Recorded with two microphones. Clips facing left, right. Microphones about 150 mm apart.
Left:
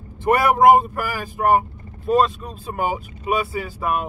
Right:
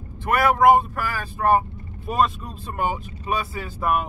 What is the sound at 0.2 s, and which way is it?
Speech, 20° left (ahead or behind).